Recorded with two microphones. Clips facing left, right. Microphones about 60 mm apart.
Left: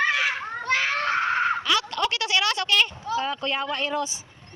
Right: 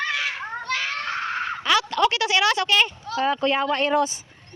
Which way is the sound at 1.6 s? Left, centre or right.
Right.